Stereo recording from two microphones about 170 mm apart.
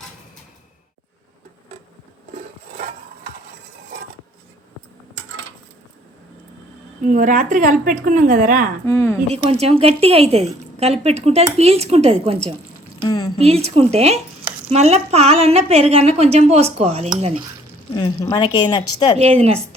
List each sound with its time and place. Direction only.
7.0 s a woman's voice: 50° right (ahead or behind)
8.9 s speech: 15° left (ahead or behind)
9.3 s a woman's voice: 35° right (ahead or behind)
13.0 s speech: 25° left (ahead or behind)
13.4 s a woman's voice: 35° right (ahead or behind)
17.9 s a woman's voice: 25° left (ahead or behind)
19.2 s a woman's voice: 35° right (ahead or behind)